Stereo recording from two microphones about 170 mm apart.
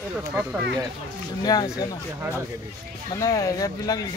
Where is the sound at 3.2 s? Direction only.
20° left (ahead or behind).